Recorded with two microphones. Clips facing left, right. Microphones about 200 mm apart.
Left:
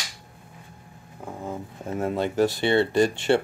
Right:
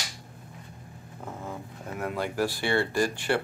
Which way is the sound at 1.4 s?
25° left (ahead or behind).